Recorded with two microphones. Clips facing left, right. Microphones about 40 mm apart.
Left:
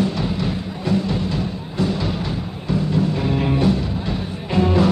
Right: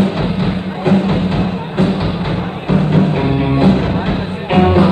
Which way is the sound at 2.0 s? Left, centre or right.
Right.